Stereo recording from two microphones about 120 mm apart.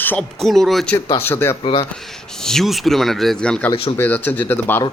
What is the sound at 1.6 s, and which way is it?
Speech, 40° left (ahead or behind).